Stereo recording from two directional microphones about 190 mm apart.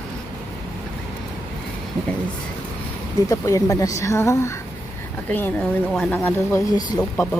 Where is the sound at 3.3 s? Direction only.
15° left (ahead or behind).